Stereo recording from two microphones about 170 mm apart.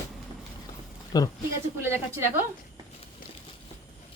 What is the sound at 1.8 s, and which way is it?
Speech, 15° right (ahead or behind).